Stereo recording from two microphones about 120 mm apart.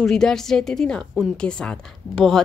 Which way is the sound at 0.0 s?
5° left (ahead or behind).